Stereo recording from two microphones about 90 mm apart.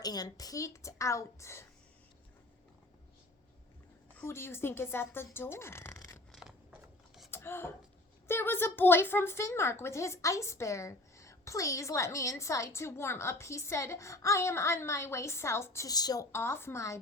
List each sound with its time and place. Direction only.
0.0 s speech: 45° left (ahead or behind)
4.3 s speech: 25° left (ahead or behind)
6.3 s scissors: 5° right (ahead or behind)
7.3 s a sound: 25° left (ahead or behind)
8.3 s speech: 25° left (ahead or behind)
15.9 s a woman's voice: 45° left (ahead or behind)
16.3 s speech: 30° left (ahead or behind)